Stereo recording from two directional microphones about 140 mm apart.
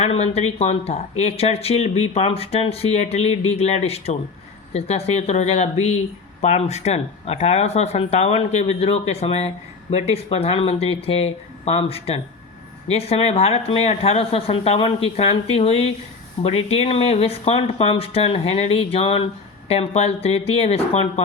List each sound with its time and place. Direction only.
0.0 s speech: 50° left (ahead or behind)